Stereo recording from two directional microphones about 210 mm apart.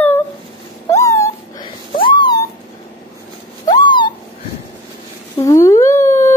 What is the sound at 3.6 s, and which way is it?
Owl, 20° left (ahead or behind).